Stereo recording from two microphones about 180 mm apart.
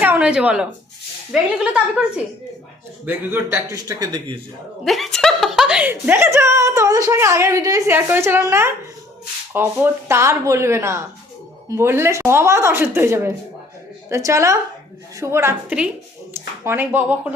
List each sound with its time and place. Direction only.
0.0 s a woman's voice: 10° right (ahead or behind)
4.9 s speech: centre (ahead or behind)